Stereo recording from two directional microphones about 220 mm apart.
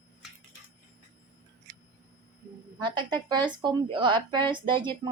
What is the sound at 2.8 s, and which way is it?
Speech, 20° right (ahead or behind).